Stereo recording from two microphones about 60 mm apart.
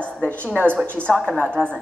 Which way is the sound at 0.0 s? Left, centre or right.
Left.